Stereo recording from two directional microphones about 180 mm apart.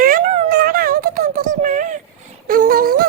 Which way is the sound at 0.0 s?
50° right (ahead or behind).